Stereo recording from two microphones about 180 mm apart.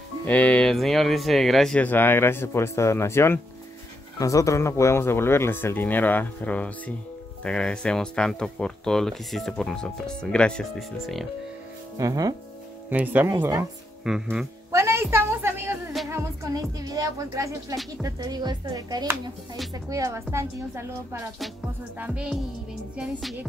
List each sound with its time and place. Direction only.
0.3 s speech: 5° left (ahead or behind)
12.0 s speech: 20° right (ahead or behind)
12.9 s a woman's voice: 10° right (ahead or behind)
14.0 s speech: 5° right (ahead or behind)
14.7 s a sound: 15° right (ahead or behind)
16.1 s music: 15° right (ahead or behind)
16.8 s a woman's voice: 20° right (ahead or behind)